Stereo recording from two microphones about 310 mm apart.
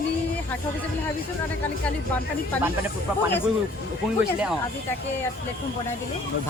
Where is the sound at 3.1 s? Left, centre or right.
Centre.